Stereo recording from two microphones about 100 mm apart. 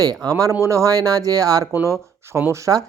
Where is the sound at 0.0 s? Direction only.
40° right (ahead or behind).